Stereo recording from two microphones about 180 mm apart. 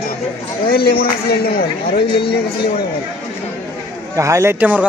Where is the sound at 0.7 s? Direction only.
60° left (ahead or behind).